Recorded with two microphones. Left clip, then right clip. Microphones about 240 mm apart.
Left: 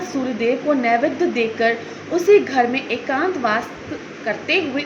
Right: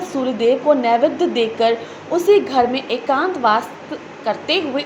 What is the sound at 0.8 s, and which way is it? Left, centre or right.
A woman's voice, centre.